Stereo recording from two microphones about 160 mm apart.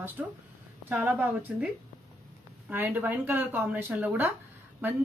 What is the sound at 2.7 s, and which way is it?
Speech, 10° right (ahead or behind).